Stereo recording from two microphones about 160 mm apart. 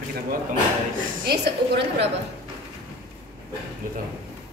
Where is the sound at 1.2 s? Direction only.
90° right.